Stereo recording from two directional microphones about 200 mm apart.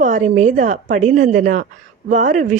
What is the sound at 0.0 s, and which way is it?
Speech, 40° right (ahead or behind).